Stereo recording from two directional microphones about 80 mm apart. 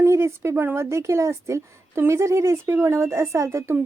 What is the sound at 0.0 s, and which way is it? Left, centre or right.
Speech, right.